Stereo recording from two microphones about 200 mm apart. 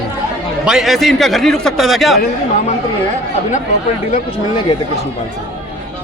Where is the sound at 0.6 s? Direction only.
Centre (ahead or behind).